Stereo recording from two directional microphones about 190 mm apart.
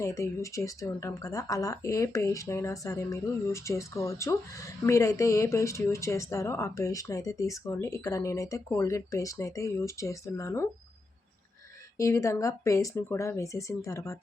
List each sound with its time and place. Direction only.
0.0 s speech: 15° left (ahead or behind)
11.9 s speech: 15° left (ahead or behind)